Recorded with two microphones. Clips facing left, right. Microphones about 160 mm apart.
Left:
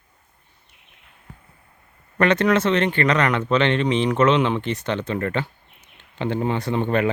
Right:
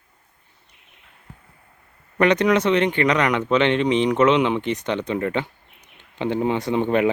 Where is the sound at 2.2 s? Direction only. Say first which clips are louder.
Right 1 dB; 15° right (ahead or behind).